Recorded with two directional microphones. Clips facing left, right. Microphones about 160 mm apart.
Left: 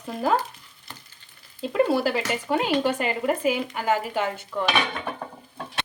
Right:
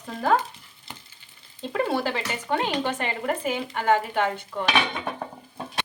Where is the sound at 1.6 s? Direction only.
5° left (ahead or behind).